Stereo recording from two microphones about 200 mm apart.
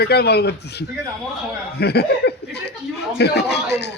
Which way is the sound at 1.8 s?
55° left (ahead or behind).